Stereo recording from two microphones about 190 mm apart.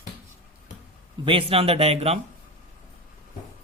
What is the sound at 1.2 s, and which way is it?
Speech, 30° right (ahead or behind).